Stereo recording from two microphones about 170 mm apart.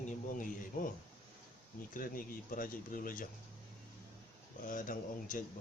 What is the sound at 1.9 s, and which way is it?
Speech, 55° left (ahead or behind).